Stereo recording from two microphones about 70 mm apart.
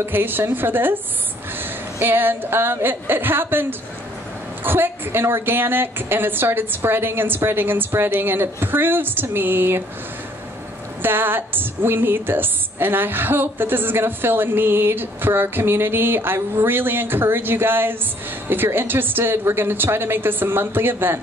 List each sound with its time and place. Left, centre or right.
0.0 s a woman's voice: right
4.6 s a woman's voice: right
11.0 s a woman's voice: right